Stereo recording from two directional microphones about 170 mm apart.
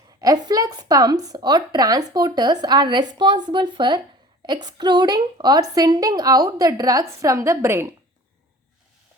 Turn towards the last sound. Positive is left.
turn(degrees=-15)  # may be behind; listen again after turning